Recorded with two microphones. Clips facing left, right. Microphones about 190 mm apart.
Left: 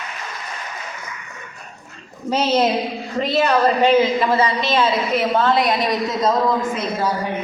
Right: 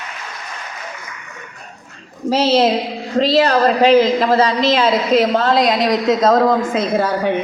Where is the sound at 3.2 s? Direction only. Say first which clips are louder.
Right 4 dB; 90° right; by 7.3 s 70° right (ahead or behind).